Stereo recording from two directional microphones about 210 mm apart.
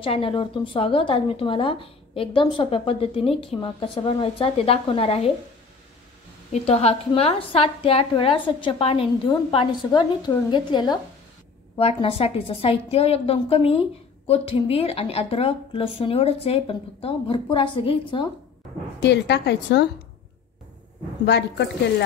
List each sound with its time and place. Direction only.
0.0 s a woman's voice: 25° left (ahead or behind)
6.5 s a woman's voice: 30° left (ahead or behind)
18.9 s a woman's voice: 55° left (ahead or behind)